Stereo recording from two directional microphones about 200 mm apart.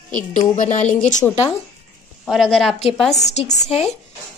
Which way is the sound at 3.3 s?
30° left (ahead or behind).